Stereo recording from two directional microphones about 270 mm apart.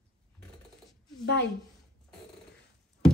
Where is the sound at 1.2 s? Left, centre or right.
Left.